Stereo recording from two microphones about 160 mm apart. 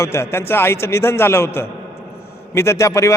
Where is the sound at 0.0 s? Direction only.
15° left (ahead or behind).